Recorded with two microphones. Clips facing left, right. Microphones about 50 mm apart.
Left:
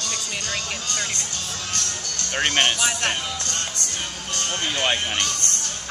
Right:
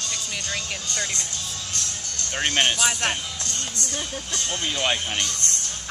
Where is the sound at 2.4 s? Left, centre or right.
Left.